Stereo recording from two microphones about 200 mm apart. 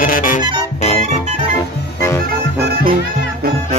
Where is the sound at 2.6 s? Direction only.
55° right (ahead or behind).